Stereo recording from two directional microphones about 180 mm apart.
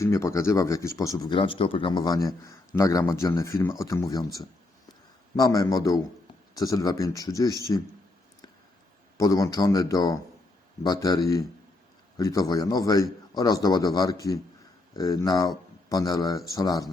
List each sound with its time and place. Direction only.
0.0 s speech: 15° left (ahead or behind)
5.4 s a man's voice: 20° left (ahead or behind)
9.1 s a man's voice: 20° left (ahead or behind)